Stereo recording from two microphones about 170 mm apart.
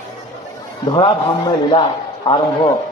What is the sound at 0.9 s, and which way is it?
A man's voice, 25° left (ahead or behind).